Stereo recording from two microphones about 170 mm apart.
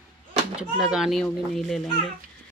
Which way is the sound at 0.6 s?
5° right (ahead or behind).